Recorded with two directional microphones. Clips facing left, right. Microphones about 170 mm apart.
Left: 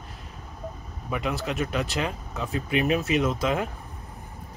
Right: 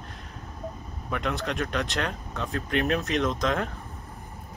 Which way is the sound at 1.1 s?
5° left (ahead or behind).